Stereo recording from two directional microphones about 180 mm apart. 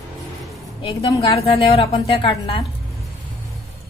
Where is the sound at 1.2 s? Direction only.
35° left (ahead or behind).